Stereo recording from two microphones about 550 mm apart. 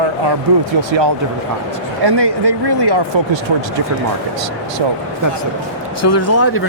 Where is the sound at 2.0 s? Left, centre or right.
Right.